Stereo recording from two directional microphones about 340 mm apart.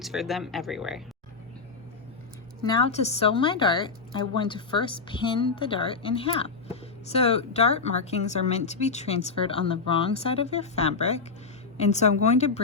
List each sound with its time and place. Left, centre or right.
0.0 s speech: centre
2.6 s a woman's voice: centre